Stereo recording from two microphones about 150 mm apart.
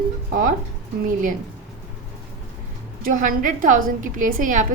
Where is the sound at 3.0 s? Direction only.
60° right (ahead or behind).